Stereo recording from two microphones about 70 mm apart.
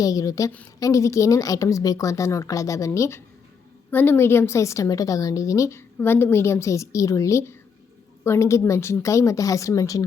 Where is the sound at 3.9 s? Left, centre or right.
Left.